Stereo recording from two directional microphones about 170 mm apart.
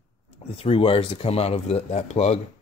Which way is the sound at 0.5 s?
35° left (ahead or behind).